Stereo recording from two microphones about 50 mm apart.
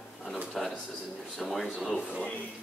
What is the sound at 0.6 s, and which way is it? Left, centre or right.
A man's voice, centre.